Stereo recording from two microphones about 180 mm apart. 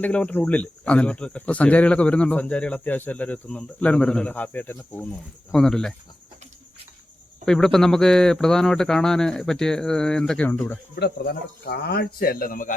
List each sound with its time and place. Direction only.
0.0 s speech: 5° left (ahead or behind)
7.4 s speech: centre (ahead or behind)
11.0 s speech: 65° left (ahead or behind)